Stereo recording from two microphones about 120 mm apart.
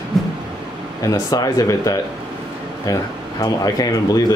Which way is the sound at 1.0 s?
30° left (ahead or behind).